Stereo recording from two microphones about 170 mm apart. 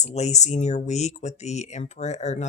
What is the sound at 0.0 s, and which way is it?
Speech, 40° left (ahead or behind).